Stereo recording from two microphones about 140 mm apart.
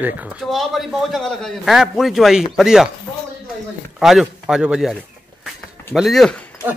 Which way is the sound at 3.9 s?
5° right (ahead or behind).